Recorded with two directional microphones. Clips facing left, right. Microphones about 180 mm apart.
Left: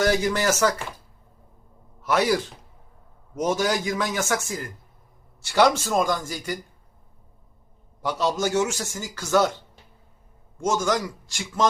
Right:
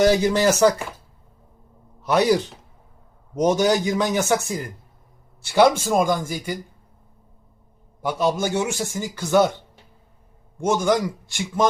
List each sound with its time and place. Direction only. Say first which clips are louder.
0.0 s speech: right 5 dB; 20° right (ahead or behind)
2.0 s a man's voice: right 4 dB; 20° right (ahead or behind)
8.0 s a man's voice: right 2 dB; 15° right (ahead or behind)
10.7 s a man's voice: right 4 dB; 15° right (ahead or behind)